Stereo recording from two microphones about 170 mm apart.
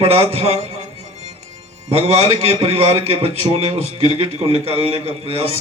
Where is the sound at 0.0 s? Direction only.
35° right (ahead or behind).